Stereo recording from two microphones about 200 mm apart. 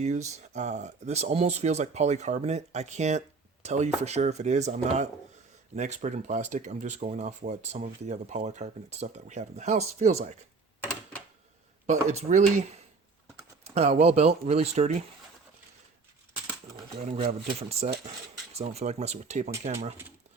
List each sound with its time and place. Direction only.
0.0 s speech: 35° right (ahead or behind)
12.1 s speech: 35° right (ahead or behind)
13.7 s a sound: 30° right (ahead or behind)
14.0 s speech: 30° right (ahead or behind)
16.7 s a sound: 25° right (ahead or behind)
17.6 s speech: 30° right (ahead or behind)